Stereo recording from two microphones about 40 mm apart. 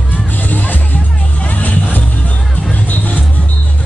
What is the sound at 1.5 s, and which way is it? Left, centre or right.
Vehicle, left.